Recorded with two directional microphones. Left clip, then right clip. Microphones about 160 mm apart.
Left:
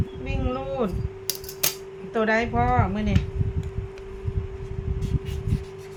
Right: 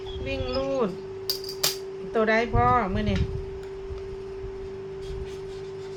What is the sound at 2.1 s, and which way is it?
A woman's voice, 5° left (ahead or behind).